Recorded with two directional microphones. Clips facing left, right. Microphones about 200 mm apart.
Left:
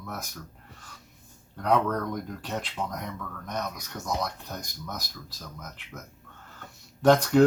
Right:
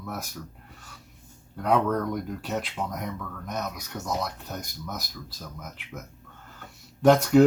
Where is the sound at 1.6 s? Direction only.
5° right (ahead or behind).